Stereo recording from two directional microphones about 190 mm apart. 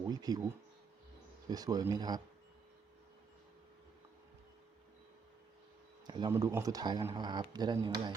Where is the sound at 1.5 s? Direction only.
20° right (ahead or behind).